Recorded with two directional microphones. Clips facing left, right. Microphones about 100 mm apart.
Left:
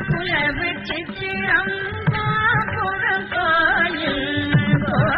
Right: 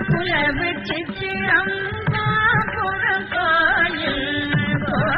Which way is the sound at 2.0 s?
Centre (ahead or behind).